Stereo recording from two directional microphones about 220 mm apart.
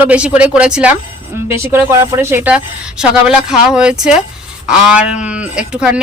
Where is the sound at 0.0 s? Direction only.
5° right (ahead or behind).